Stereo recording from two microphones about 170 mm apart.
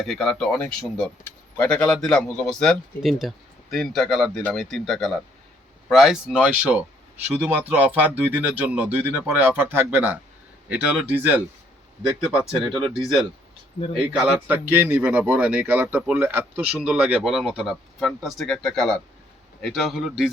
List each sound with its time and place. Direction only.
0.0 s a man's voice: centre (ahead or behind)
12.5 s a man's voice: centre (ahead or behind)